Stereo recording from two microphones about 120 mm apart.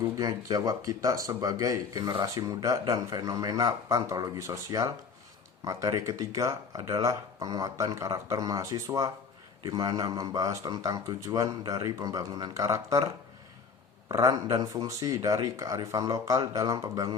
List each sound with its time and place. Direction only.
0.2 s speech: 30° right (ahead or behind)
14.1 s speech: 30° right (ahead or behind)